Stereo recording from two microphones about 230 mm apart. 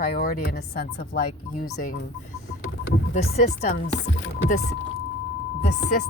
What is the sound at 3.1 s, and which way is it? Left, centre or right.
Speech, left.